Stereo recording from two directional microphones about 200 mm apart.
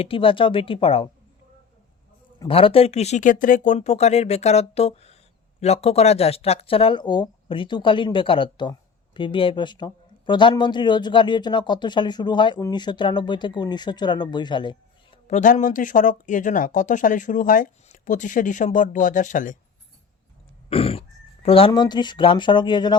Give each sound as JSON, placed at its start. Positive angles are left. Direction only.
{"t": 0.0, "sound": "speech", "side_deg": 25}
{"t": 2.5, "sound": "speech", "side_deg": 30}
{"t": 15.3, "sound": "speech", "side_deg": 35}
{"t": 20.7, "sound": "throat clearing", "side_deg": 30}
{"t": 21.4, "sound": "speech", "side_deg": 25}